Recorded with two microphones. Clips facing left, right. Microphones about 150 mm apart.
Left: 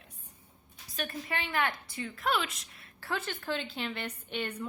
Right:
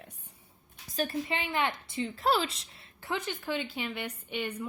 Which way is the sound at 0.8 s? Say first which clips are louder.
Right 6 dB; 35° right (ahead or behind).